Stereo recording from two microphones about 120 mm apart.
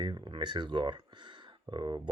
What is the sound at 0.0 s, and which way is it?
Speech, 40° right (ahead or behind).